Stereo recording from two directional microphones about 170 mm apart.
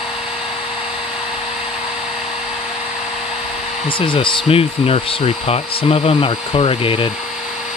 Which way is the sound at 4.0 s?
30° left (ahead or behind).